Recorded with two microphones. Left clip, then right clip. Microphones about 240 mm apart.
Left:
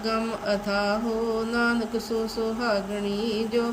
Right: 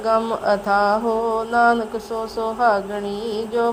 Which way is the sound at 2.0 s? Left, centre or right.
Centre.